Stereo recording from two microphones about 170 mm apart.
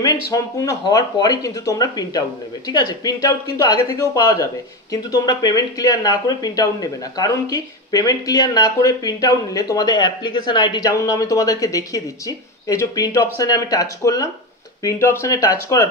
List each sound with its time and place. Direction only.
0.3 s speech: 20° left (ahead or behind)